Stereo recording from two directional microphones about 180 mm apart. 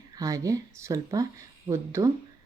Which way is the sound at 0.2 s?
20° right (ahead or behind).